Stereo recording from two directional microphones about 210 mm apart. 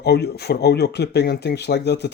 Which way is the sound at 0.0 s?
50° left (ahead or behind).